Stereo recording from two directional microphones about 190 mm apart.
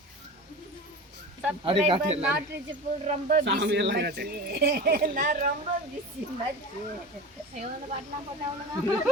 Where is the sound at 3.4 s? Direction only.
65° right (ahead or behind); by 5.5 s 45° right (ahead or behind).